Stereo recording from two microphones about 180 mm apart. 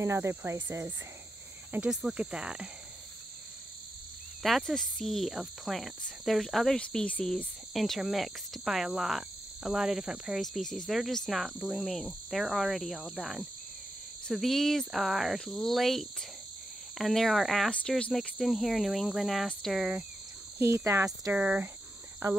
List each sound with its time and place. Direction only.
0.0 s speech: 15° right (ahead or behind)
1.7 s speech: 5° right (ahead or behind)
4.4 s speech: centre (ahead or behind)
20.5 s speech: 15° right (ahead or behind)